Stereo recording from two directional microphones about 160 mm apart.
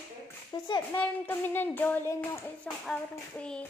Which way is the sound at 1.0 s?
10° left (ahead or behind).